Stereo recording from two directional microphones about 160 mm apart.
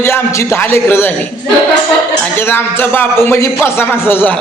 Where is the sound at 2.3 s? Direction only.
15° left (ahead or behind).